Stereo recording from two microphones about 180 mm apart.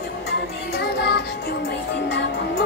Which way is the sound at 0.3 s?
70° left (ahead or behind).